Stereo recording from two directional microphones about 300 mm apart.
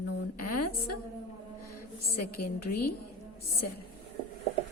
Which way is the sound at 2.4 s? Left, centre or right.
Left.